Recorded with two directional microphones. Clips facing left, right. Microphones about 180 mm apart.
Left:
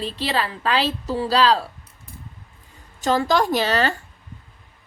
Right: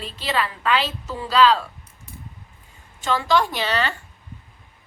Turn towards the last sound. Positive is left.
turn(degrees=40)  # may be behind; listen again after turning